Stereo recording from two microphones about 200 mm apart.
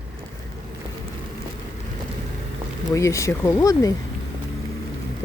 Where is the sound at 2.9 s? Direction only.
15° left (ahead or behind).